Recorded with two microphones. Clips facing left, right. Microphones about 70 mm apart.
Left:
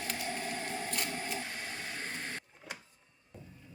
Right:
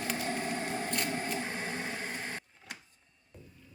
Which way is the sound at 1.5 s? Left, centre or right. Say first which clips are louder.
Right 5 dB; right.